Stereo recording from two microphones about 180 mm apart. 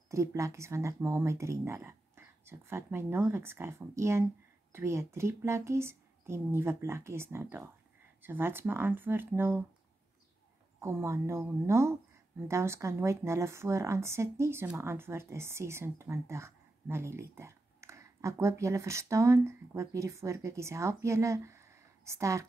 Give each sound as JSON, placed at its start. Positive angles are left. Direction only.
{"t": 0.1, "sound": "a woman's voice", "side_deg": -15}
{"t": 10.8, "sound": "a woman's voice", "side_deg": -15}